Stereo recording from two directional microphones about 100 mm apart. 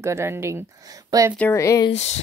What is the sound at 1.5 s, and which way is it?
Speech, 30° left (ahead or behind).